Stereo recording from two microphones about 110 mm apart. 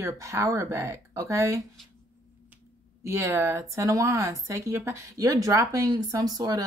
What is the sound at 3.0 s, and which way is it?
Speech, 25° right (ahead or behind).